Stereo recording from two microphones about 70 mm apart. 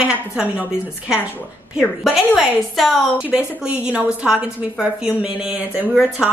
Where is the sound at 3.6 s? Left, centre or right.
Centre.